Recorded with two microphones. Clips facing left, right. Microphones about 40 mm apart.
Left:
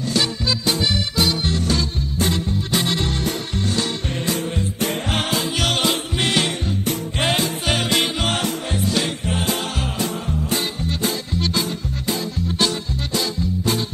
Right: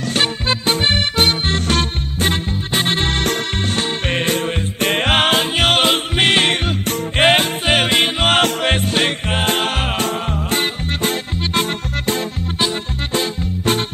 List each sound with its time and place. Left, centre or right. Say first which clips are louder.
0.1 s music: right 3 dB; right
6.7 s music: right 3 dB; right
8.4 s music: right 7 dB; right
8.9 s music: right 4 dB; right
13.1 s music: right 2 dB; right